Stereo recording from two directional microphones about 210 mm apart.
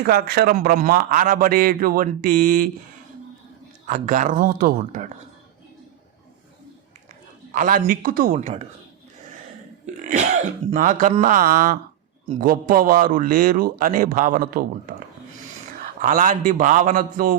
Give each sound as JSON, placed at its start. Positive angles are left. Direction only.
{"t": 0.0, "sound": "a man's voice", "side_deg": -45}
{"t": 3.8, "sound": "a man's voice", "side_deg": -35}
{"t": 7.5, "sound": "a man's voice", "side_deg": -40}
{"t": 9.8, "sound": "throat clearing", "side_deg": -35}
{"t": 10.7, "sound": "a man's voice", "side_deg": -35}